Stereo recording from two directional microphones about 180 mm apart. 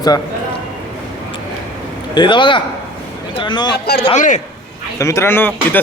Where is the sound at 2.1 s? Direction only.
25° left (ahead or behind).